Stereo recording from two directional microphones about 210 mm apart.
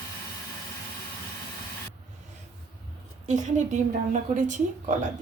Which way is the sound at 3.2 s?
35° right (ahead or behind).